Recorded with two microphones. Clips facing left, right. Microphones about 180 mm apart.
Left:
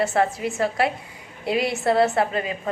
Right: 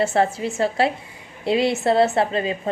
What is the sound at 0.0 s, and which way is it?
A woman's voice, 25° right (ahead or behind).